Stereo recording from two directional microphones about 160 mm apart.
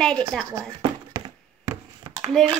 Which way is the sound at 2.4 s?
5° left (ahead or behind).